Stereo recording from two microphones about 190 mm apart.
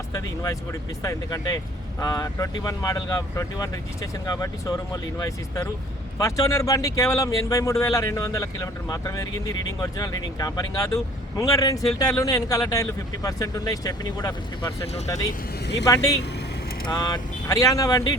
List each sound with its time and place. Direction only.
0.1 s speech: 15° left (ahead or behind)